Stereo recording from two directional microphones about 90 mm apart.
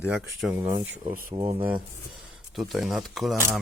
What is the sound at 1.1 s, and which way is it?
Speech, 25° right (ahead or behind).